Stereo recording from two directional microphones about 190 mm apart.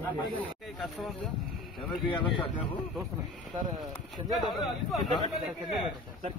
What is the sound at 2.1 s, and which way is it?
Speech, 25° left (ahead or behind).